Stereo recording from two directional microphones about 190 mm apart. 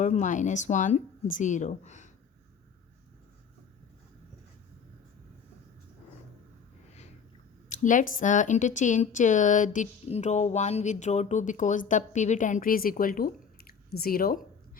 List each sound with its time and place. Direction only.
0.0 s speech: 40° left (ahead or behind)
7.7 s speech: 40° left (ahead or behind)